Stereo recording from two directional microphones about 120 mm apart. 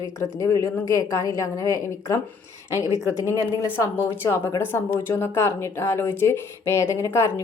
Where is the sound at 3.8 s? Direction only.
20° left (ahead or behind).